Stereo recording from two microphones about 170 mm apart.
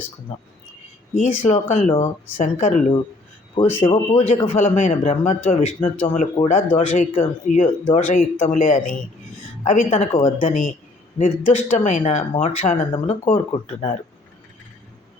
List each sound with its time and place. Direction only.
0.3 s a man's voice: 35° left (ahead or behind)
3.8 s speech: 30° left (ahead or behind)
4.4 s a man's voice: 45° left (ahead or behind)
10.1 s speech: 30° left (ahead or behind)